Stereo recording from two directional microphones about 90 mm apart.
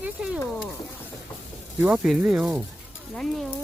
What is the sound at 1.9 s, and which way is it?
Speech, 5° right (ahead or behind).